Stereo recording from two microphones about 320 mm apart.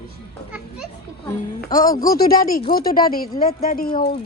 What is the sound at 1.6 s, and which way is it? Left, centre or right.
Speech, left.